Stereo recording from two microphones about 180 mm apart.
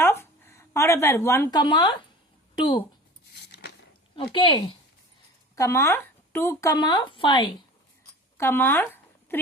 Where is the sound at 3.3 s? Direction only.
65° left (ahead or behind).